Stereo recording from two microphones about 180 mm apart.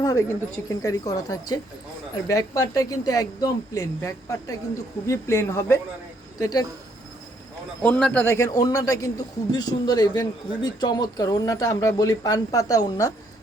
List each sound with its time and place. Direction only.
0.0 s a man's voice: 20° left (ahead or behind)
7.8 s a man's voice: 5° left (ahead or behind)